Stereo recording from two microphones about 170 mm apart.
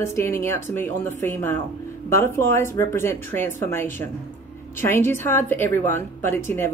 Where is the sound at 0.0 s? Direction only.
15° left (ahead or behind).